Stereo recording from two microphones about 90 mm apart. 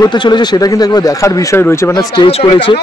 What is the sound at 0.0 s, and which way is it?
Speech, 55° left (ahead or behind).